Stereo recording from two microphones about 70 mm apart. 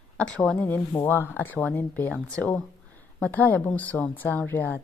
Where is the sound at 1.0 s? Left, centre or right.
Left.